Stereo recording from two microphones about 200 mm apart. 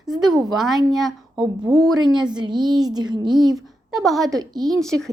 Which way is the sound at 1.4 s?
15° right (ahead or behind).